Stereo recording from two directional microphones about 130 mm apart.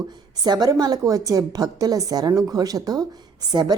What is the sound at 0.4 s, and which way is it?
A woman's voice, 30° right (ahead or behind).